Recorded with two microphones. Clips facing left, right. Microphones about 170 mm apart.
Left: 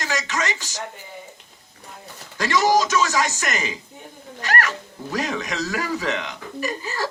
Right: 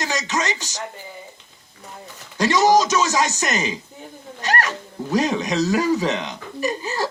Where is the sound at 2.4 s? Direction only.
20° right (ahead or behind).